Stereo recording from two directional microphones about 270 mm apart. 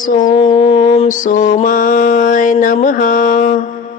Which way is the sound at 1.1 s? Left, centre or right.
Left.